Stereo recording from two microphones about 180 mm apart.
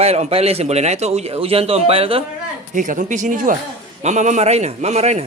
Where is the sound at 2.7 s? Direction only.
45° right (ahead or behind).